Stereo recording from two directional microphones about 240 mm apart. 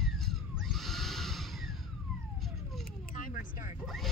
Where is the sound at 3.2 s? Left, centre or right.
Left.